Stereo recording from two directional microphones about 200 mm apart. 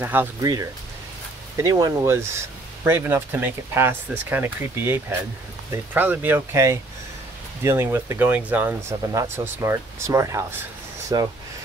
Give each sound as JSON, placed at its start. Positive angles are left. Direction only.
{"t": 0.0, "sound": "speech", "side_deg": -10}